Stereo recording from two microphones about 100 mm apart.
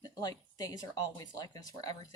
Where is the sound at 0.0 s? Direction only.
40° left (ahead or behind).